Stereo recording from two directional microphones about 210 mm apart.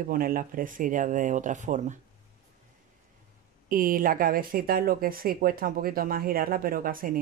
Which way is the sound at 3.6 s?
40° right (ahead or behind).